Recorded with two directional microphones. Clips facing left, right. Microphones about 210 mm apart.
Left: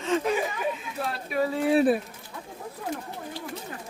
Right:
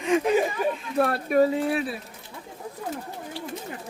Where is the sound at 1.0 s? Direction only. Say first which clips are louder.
Right 12 dB; 60° right (ahead or behind).